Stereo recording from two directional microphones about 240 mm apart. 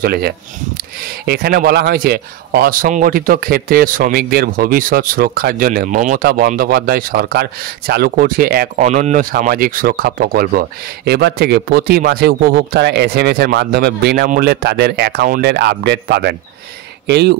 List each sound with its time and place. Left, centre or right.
0.0 s speech: right